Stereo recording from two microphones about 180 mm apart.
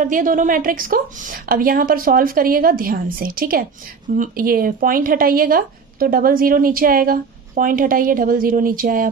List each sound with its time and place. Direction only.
0.0 s speech: 50° right (ahead or behind)